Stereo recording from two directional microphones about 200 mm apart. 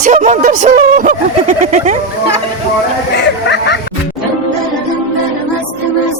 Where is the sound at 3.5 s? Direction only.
55° left (ahead or behind).